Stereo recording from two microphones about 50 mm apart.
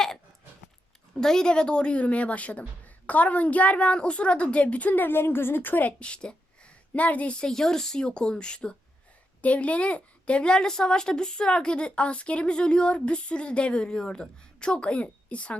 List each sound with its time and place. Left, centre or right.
1.1 s a woman's voice: centre; by 5.9 s left
6.0 s a woman's voice: left